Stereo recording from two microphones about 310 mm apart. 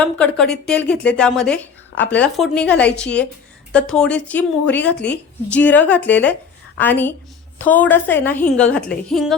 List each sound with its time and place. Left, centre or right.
0.0 s a woman's voice: centre